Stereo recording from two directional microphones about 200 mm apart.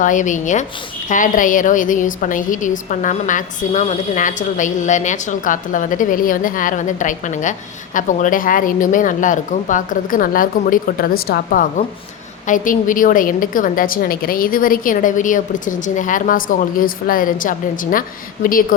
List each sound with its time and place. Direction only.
0.0 s a woman's voice: 40° left (ahead or behind)